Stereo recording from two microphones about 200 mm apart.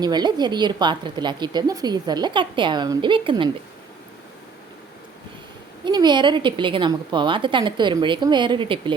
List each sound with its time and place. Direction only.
0.0 s a woman's voice: 20° right (ahead or behind)
5.8 s a woman's voice: 20° right (ahead or behind)